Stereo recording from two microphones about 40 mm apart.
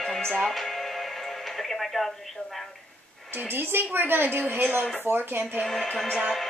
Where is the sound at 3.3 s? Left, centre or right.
Right.